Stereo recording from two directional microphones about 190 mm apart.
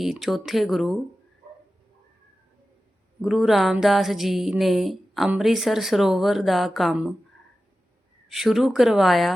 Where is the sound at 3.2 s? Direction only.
Centre (ahead or behind).